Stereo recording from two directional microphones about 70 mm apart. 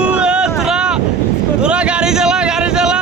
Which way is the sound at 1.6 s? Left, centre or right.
Centre.